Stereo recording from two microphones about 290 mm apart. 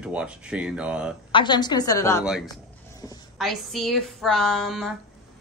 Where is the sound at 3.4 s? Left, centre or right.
Centre.